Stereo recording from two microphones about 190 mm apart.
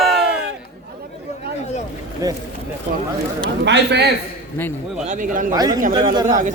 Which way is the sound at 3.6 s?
60° right (ahead or behind).